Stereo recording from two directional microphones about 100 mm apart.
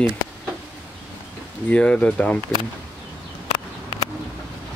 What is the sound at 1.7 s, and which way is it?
Speech, 15° left (ahead or behind).